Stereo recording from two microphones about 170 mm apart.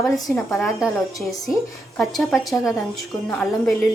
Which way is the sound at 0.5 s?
Centre (ahead or behind).